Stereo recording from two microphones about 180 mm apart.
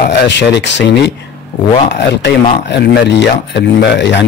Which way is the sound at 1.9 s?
70° left (ahead or behind).